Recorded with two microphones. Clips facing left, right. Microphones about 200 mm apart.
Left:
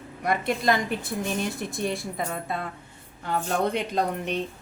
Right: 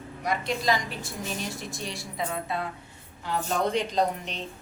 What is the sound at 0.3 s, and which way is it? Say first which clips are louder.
A woman's voice: left 3 dB; 55° left (ahead or behind).